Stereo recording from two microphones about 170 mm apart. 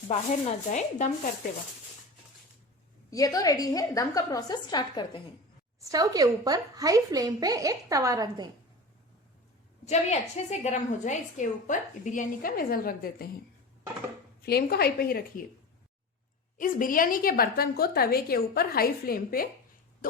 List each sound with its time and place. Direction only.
0.1 s a woman's voice: 45° left (ahead or behind)
3.1 s a woman's voice: 20° left (ahead or behind)
5.9 s a woman's voice: 20° right (ahead or behind)
9.8 s a woman's voice: 40° left (ahead or behind); by 13.3 s 60° left (ahead or behind)
14.4 s a woman's voice: 65° left (ahead or behind)
16.6 s a woman's voice: 55° left (ahead or behind)